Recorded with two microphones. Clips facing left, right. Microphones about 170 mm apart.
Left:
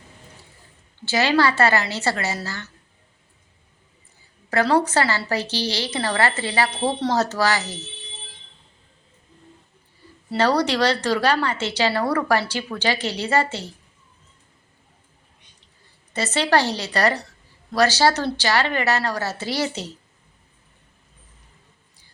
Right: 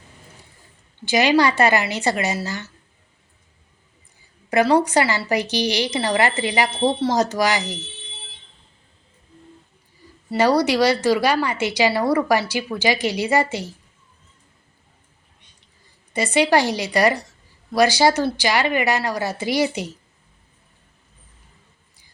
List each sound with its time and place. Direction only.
1.0 s a woman's voice: 15° right (ahead or behind)
4.4 s a woman's voice: 15° right (ahead or behind)
10.3 s a woman's voice: 10° right (ahead or behind)
16.1 s a woman's voice: 15° right (ahead or behind)